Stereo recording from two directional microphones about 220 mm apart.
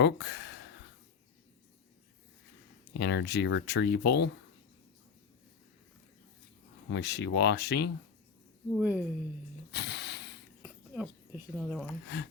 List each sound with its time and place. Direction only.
0.0 s speech: 50° left (ahead or behind)
3.0 s speech: 50° left (ahead or behind)
6.9 s speech: 50° left (ahead or behind)
8.7 s speech: 5° right (ahead or behind)
9.7 s a sound: 50° left (ahead or behind)
10.6 s a sound: 5° right (ahead or behind)
12.0 s speech: 50° left (ahead or behind)